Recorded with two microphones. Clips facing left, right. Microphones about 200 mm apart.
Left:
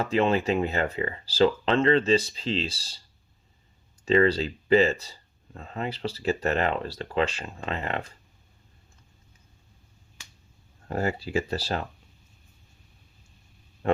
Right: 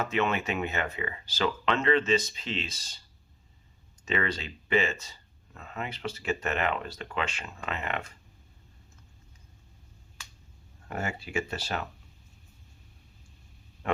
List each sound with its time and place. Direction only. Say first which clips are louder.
0.0 s speech: left 5 dB; 30° left (ahead or behind)
4.0 s speech: left 10 dB; 35° left (ahead or behind)
10.8 s speech: left 7 dB; 35° left (ahead or behind)
13.8 s a sound: left 6 dB; 30° left (ahead or behind)